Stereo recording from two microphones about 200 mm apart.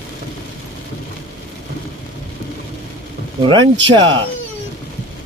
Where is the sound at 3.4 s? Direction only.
25° right (ahead or behind).